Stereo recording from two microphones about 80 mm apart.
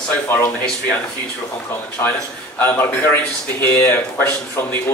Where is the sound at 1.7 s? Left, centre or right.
Left.